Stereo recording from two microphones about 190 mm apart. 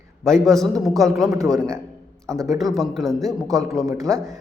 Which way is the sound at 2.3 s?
15° right (ahead or behind).